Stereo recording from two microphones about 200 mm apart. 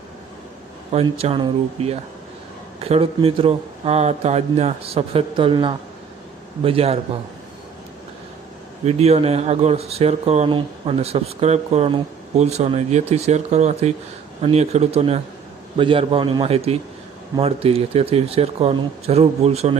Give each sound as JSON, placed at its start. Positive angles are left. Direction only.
{"t": 0.9, "sound": "speech", "side_deg": -30}
{"t": 8.8, "sound": "speech", "side_deg": -35}